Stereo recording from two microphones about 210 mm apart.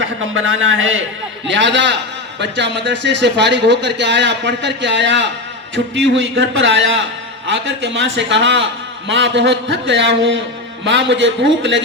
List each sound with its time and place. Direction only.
0.0 s a man's voice: 65° right (ahead or behind)